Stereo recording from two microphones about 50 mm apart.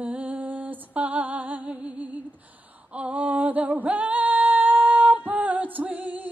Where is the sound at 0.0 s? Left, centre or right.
Right.